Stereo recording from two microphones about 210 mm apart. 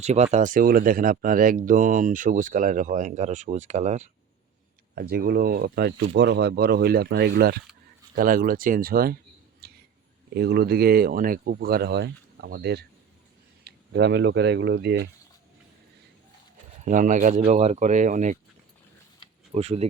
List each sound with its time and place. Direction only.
0.0 s speech: 30° right (ahead or behind)
4.9 s speech: 50° right (ahead or behind)
9.6 s a sound: 50° right (ahead or behind)
10.3 s speech: 50° right (ahead or behind)
16.8 s speech: 35° right (ahead or behind)
19.5 s speech: 30° right (ahead or behind)